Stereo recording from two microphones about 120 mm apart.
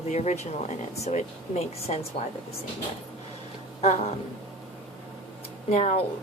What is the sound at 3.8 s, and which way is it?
Speech, 60° left (ahead or behind).